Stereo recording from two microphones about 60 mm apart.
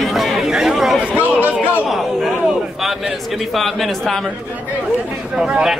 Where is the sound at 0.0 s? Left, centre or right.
Centre.